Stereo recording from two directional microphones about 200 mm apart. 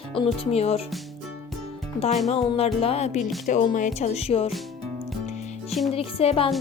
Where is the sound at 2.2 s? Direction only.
30° left (ahead or behind).